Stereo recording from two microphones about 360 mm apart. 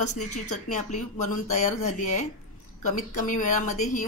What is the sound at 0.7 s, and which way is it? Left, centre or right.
A woman's voice, centre.